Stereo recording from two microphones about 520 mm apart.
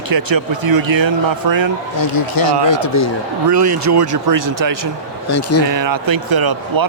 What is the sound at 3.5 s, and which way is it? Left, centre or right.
Speech, right.